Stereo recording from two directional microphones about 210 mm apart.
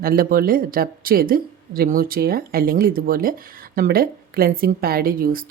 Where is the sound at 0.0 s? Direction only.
45° right (ahead or behind).